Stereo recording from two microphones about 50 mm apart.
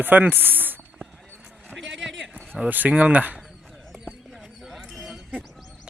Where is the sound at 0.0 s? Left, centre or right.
Right.